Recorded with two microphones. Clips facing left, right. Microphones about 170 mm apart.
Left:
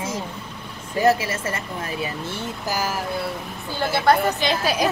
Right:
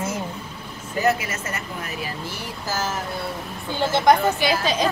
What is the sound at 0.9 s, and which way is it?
A woman's voice, 30° left (ahead or behind).